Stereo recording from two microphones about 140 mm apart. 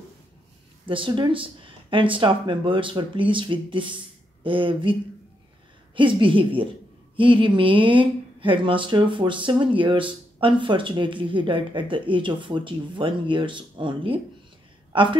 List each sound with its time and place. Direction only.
0.8 s speech: 35° right (ahead or behind)
5.9 s speech: 35° right (ahead or behind)